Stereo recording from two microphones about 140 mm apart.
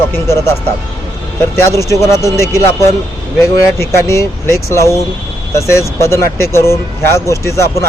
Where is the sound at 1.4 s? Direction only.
20° left (ahead or behind).